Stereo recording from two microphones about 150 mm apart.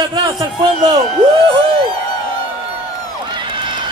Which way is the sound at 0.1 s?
25° right (ahead or behind).